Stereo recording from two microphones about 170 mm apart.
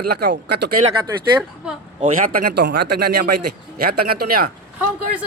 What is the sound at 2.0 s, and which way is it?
Speech, 50° right (ahead or behind).